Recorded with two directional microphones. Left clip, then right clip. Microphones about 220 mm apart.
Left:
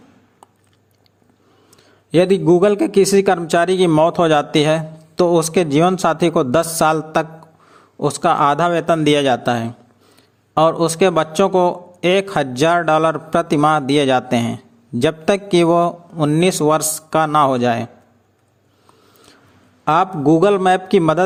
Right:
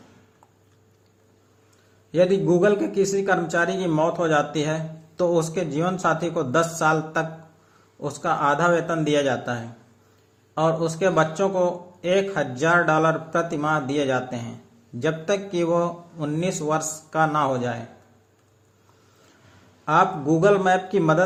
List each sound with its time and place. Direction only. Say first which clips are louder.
2.1 s a man's voice: left 6 dB; 45° left (ahead or behind)
19.8 s a man's voice: left 5 dB; 45° left (ahead or behind)